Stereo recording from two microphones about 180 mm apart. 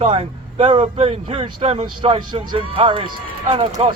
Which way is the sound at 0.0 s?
30° right (ahead or behind).